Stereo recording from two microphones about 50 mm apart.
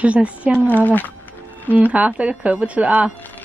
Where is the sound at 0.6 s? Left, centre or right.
Left.